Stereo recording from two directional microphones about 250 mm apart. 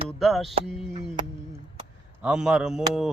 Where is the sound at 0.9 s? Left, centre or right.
Right.